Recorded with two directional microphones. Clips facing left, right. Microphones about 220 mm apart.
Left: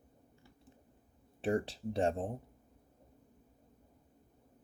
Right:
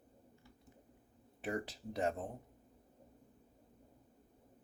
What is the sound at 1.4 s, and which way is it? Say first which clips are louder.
Speech: left 7 dB; 30° left (ahead or behind).